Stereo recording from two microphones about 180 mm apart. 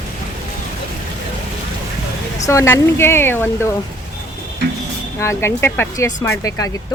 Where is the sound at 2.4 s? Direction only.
15° left (ahead or behind).